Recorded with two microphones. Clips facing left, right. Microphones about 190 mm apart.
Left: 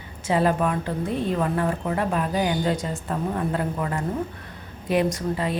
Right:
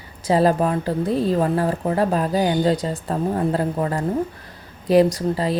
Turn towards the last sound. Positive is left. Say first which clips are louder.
# right 4 dB
turn(degrees=-35)  # may be behind; listen again after turning